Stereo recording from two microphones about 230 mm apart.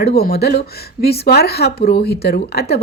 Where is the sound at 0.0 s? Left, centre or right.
Left.